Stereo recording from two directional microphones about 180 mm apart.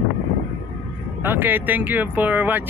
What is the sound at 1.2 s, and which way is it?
Speech, 10° right (ahead or behind).